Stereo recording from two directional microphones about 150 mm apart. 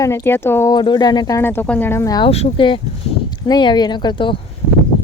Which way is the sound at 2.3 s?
40° left (ahead or behind).